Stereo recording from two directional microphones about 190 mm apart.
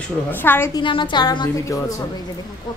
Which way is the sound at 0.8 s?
25° left (ahead or behind).